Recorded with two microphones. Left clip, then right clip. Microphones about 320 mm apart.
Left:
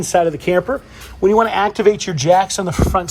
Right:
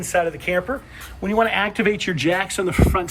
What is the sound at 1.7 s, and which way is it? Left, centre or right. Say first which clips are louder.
Speech: left 6 dB; centre.